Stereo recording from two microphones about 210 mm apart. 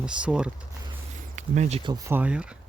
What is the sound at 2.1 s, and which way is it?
Speech, 5° right (ahead or behind).